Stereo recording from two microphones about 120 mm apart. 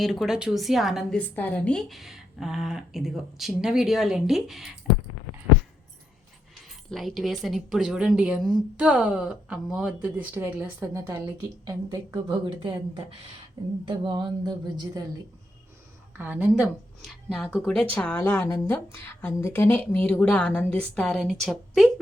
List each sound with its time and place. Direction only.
0.0 s speech: centre (ahead or behind)
1.2 s speech: 10° left (ahead or behind)
6.9 s a woman's voice: centre (ahead or behind); by 11.2 s 20° right (ahead or behind)
11.3 s speech: 35° right (ahead or behind)
16.1 s speech: 15° right (ahead or behind)
16.6 s speech: centre (ahead or behind)